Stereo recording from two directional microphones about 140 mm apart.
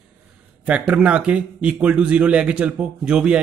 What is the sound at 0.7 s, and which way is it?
Speech, 10° right (ahead or behind).